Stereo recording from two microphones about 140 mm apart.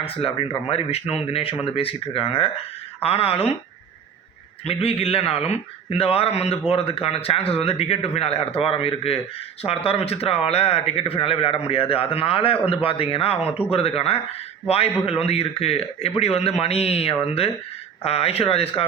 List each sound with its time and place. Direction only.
0.2 s a man's voice: 40° left (ahead or behind)
4.6 s a man's voice: 45° left (ahead or behind)